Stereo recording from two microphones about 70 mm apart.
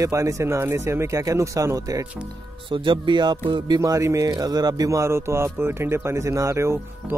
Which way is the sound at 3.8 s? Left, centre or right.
Right.